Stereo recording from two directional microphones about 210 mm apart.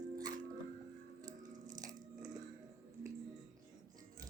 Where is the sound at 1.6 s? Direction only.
20° right (ahead or behind).